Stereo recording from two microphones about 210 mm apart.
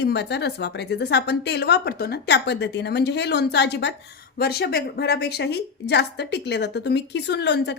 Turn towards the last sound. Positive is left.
turn(degrees=55)  # may be behind; listen again after turning